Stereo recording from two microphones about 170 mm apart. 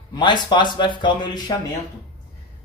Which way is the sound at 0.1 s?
25° left (ahead or behind).